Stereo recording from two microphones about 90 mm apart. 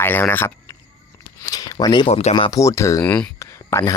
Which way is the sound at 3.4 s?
35° left (ahead or behind).